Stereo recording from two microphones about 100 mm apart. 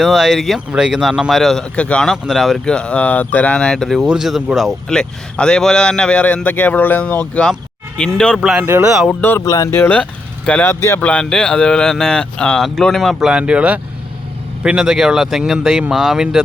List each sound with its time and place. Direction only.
0.0 s a man's voice: centre (ahead or behind)
9.0 s speech: 20° left (ahead or behind)
9.4 s speech: 40° left (ahead or behind)
9.7 s speech: 20° left (ahead or behind)
11.0 s speech: 10° left (ahead or behind)
13.1 s a man's voice: 10° right (ahead or behind)